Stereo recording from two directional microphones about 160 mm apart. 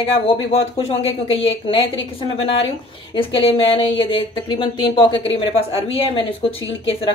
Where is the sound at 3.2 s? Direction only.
35° left (ahead or behind).